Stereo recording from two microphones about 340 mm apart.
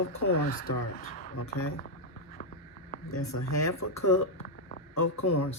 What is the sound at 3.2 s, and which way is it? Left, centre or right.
Speech, left.